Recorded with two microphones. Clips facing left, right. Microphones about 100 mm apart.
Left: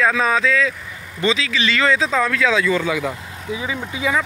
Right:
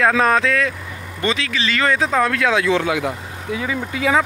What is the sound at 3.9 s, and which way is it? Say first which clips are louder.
Speech: right 4 dB; 75° right (ahead or behind).